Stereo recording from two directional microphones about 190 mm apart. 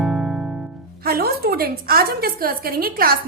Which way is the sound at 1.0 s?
55° right (ahead or behind).